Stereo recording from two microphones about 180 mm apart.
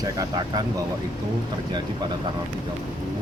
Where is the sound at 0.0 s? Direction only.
20° right (ahead or behind).